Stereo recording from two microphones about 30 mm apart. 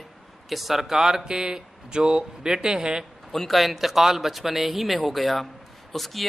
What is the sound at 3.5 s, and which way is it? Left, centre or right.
Speech, centre.